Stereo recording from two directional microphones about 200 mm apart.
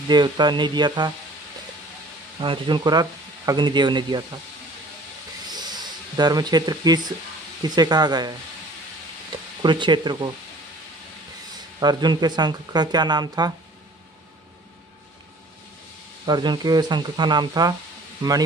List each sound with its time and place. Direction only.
0.1 s speech: 20° right (ahead or behind)
2.4 s speech: 25° right (ahead or behind)
5.5 s a sound: 20° right (ahead or behind)
7.6 s speech: 20° right (ahead or behind)
9.6 s speech: 20° right (ahead or behind)
11.8 s speech: 20° right (ahead or behind)
16.3 s speech: 20° right (ahead or behind)